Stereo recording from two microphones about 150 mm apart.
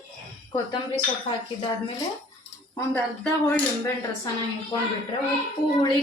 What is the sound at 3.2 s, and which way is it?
Speech, 10° left (ahead or behind).